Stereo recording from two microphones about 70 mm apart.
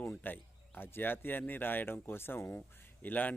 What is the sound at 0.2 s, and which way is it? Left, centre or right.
Speech, left.